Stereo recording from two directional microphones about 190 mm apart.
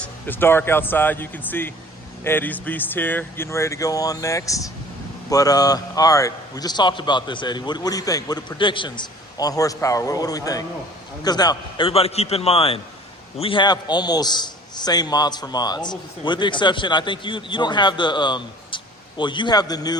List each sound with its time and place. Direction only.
0.0 s a man's voice: 10° left (ahead or behind)